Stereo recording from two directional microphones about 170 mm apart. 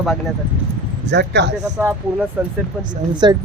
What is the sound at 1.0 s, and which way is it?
Speech, 90° right.